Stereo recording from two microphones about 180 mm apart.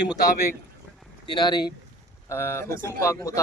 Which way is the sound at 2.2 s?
15° left (ahead or behind).